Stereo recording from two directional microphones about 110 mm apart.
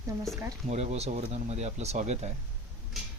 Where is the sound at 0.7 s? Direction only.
75° right (ahead or behind).